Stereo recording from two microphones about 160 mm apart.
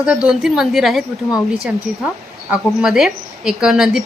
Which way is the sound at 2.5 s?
5° right (ahead or behind).